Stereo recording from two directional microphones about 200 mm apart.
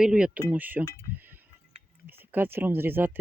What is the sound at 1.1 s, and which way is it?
Chink, 10° right (ahead or behind).